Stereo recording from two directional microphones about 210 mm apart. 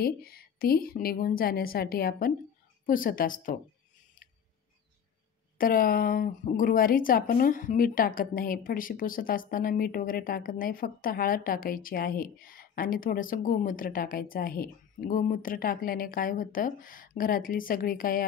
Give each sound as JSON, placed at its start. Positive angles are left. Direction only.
{"t": 0.0, "sound": "a woman's voice", "side_deg": 45}
{"t": 5.6, "sound": "speech", "side_deg": 45}